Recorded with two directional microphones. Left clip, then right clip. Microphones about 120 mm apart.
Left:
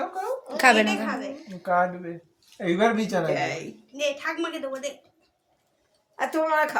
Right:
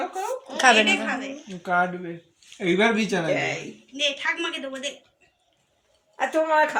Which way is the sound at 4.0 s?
45° left (ahead or behind).